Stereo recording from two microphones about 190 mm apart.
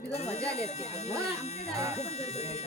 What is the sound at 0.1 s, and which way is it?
Speech, 35° left (ahead or behind).